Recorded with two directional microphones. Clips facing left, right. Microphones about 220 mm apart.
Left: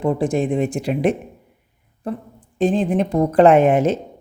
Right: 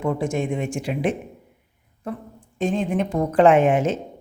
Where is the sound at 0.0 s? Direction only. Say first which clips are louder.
Left 4 dB; 35° left (ahead or behind).